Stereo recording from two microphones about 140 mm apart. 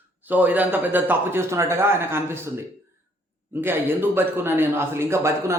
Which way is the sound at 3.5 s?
15° right (ahead or behind).